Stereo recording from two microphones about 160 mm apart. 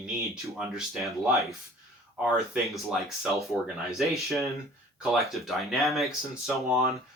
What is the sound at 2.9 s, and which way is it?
Speech, centre (ahead or behind).